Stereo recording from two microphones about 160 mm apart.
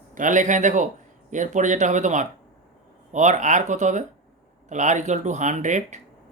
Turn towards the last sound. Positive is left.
turn(degrees=-50)  # may be behind; listen again after turning